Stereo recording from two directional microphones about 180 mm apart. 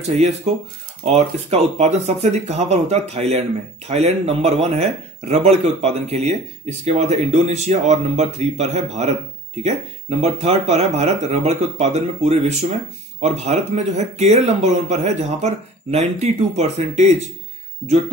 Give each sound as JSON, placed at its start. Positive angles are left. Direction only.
{"t": 0.5, "sound": "speech", "side_deg": -40}